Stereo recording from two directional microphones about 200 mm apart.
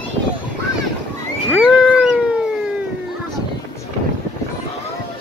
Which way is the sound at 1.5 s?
5° right (ahead or behind).